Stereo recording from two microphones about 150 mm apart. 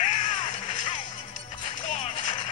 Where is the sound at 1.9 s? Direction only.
45° left (ahead or behind).